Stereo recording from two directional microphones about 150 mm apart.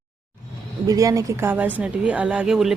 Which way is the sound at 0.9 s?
20° right (ahead or behind).